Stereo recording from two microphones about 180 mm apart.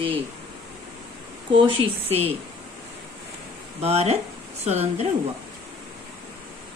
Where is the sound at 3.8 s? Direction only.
35° right (ahead or behind).